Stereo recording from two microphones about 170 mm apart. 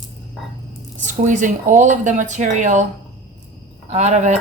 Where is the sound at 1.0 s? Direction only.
50° right (ahead or behind).